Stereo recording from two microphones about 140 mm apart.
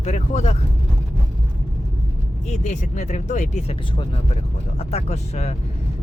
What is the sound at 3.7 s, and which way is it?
Speech, 45° left (ahead or behind).